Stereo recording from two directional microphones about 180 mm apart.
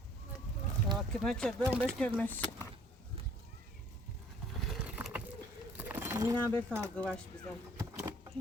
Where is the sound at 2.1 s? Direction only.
10° left (ahead or behind).